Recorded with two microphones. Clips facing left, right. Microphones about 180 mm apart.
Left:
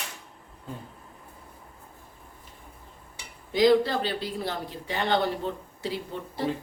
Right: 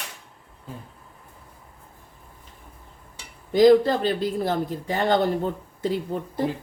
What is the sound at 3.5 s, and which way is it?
Speech, 45° right (ahead or behind).